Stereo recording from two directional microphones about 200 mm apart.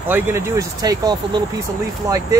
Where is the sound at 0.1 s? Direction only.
15° right (ahead or behind).